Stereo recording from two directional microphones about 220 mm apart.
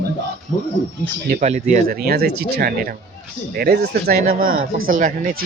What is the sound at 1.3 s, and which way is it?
Speech, 30° right (ahead or behind).